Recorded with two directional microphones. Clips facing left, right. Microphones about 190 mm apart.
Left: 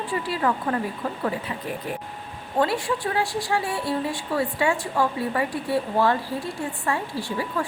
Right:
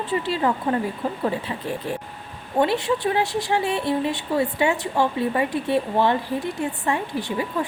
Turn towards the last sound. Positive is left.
turn(degrees=-20)  # may be behind; listen again after turning